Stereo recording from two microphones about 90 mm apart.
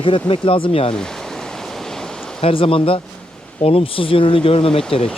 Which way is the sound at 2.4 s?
85° left.